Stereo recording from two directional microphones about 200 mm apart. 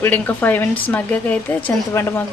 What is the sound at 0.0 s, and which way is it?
A woman's voice, 10° left (ahead or behind).